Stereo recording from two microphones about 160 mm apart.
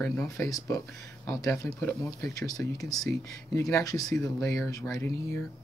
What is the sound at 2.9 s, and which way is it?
Speech, centre (ahead or behind).